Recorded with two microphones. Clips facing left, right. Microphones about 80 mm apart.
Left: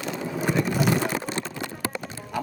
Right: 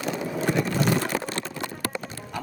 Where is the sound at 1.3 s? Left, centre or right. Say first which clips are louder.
Left 1 dB; left.